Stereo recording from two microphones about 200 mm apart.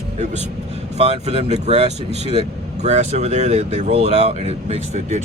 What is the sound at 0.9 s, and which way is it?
Speech, 30° right (ahead or behind).